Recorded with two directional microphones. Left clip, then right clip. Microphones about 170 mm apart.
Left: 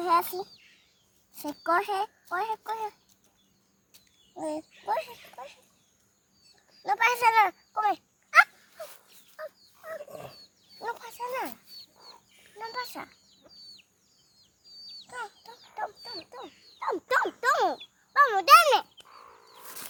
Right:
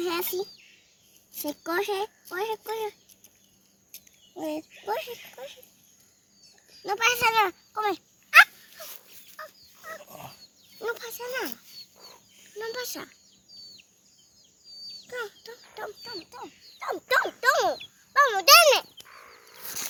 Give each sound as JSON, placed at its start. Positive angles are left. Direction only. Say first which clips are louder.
{"t": 0.0, "sound": "a sound", "louder": "left 4 dB", "side_deg": 25}
{"t": 1.4, "sound": "a child's voice", "louder": "left 2 dB", "side_deg": 25}
{"t": 4.4, "sound": "a child's voice", "louder": "right 1 dB", "side_deg": 20}
{"t": 6.7, "sound": "speech", "louder": "even", "side_deg": 25}
{"t": 8.3, "sound": "dog", "louder": "right 4 dB", "side_deg": 5}
{"t": 9.3, "sound": "turkey", "louder": "left 2 dB", "side_deg": 35}
{"t": 10.8, "sound": "a child's voice", "louder": "right 2 dB", "side_deg": 20}
{"t": 11.9, "sound": "chicken", "louder": "right 1 dB", "side_deg": 5}
{"t": 12.5, "sound": "a child's voice", "louder": "right 2 dB", "side_deg": 15}
{"t": 15.0, "sound": "fowl", "louder": "right 4 dB", "side_deg": 10}
{"t": 16.0, "sound": "a child's voice", "louder": "right 2 dB", "side_deg": 30}
{"t": 19.0, "sound": "chicken", "louder": "right 2 dB", "side_deg": 5}
{"t": 19.6, "sound": "dog", "louder": "right 8 dB", "side_deg": -30}